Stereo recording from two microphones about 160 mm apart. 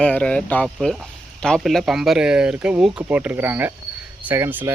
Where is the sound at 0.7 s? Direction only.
5° right (ahead or behind).